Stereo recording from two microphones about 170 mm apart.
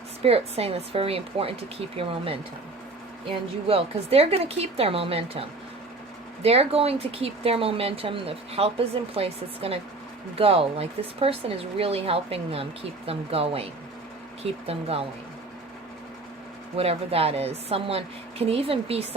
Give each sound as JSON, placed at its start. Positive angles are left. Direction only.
{"t": 0.2, "sound": "speech", "side_deg": -35}
{"t": 3.7, "sound": "speech", "side_deg": -35}
{"t": 16.7, "sound": "speech", "side_deg": -35}